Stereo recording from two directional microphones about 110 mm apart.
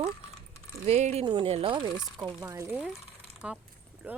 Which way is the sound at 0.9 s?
80° right.